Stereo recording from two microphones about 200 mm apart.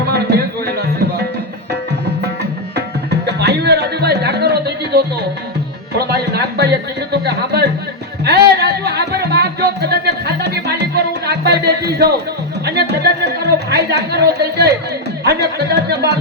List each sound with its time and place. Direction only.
0.1 s a sound: 55° right (ahead or behind)
2.7 s music: 55° right (ahead or behind)
15.2 s speech: 55° right (ahead or behind)